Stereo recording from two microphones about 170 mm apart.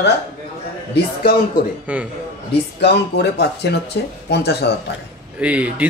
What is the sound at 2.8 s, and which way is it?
Speech, 80° left.